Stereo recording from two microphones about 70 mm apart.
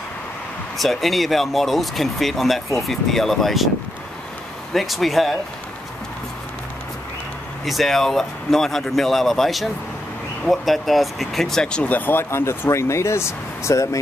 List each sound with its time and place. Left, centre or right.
0.7 s speech: centre
4.7 s speech: centre
7.6 s speech: centre
11.9 s speech: left